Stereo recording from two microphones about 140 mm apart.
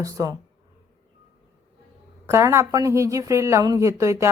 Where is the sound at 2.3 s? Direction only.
20° right (ahead or behind).